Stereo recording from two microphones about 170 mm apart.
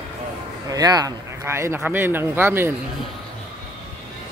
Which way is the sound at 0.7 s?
20° right (ahead or behind).